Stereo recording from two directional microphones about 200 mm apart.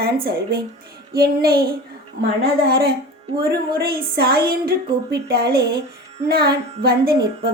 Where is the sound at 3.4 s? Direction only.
50° right (ahead or behind).